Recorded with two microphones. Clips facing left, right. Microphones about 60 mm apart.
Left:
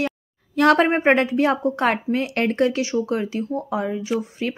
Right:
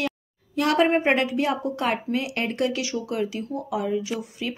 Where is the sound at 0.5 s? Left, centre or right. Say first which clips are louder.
Left 5 dB; left.